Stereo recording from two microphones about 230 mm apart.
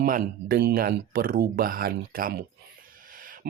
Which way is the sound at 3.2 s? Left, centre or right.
Right.